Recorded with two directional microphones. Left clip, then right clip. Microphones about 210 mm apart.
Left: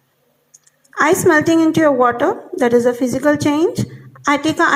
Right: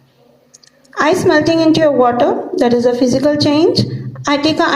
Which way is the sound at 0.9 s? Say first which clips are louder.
Right 1 dB; 45° left (ahead or behind).